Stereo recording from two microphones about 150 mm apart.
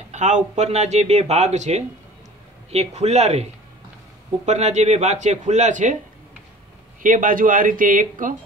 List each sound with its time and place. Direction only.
0.1 s speech: 50° right (ahead or behind)
4.5 s speech: 50° right (ahead or behind)
7.0 s speech: 65° right (ahead or behind)